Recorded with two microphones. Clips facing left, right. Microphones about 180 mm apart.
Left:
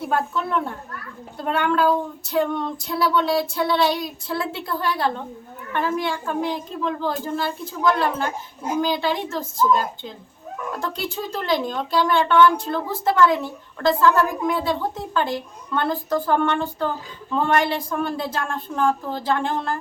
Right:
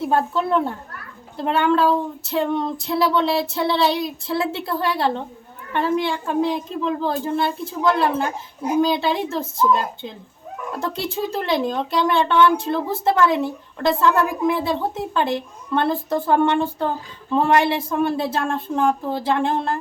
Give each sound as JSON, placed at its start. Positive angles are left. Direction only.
{"t": 0.1, "sound": "a woman's voice", "side_deg": -30}